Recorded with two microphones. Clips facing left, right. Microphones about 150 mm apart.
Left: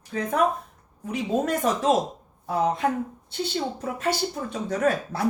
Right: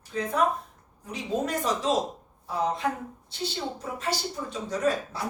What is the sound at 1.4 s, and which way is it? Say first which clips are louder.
Speech: left 3 dB; 55° left (ahead or behind).